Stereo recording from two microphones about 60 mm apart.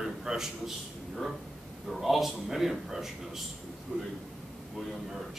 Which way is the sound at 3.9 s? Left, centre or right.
Centre.